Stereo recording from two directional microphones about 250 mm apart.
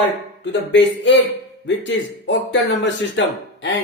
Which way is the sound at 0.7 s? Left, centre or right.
Left.